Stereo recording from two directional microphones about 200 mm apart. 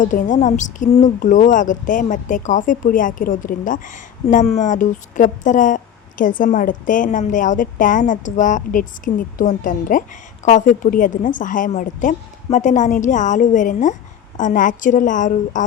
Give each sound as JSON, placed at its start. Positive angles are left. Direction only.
{"t": 0.0, "sound": "speech", "side_deg": 40}